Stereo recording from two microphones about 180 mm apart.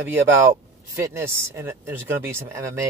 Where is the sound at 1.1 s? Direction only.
15° right (ahead or behind).